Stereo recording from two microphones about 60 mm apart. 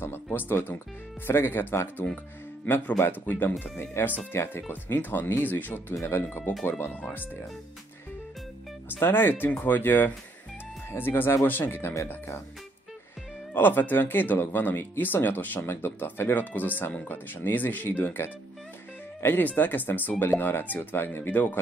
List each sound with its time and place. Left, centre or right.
0.0 s speech: left
6.9 s speech: centre
9.0 s speech: left
13.5 s speech: left